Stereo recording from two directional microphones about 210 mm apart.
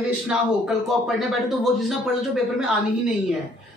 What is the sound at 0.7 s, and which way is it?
A man's voice, centre (ahead or behind).